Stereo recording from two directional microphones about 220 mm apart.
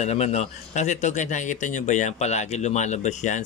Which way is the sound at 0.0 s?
30° left (ahead or behind).